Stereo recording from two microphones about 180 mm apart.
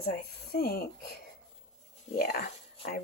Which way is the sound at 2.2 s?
55° left (ahead or behind).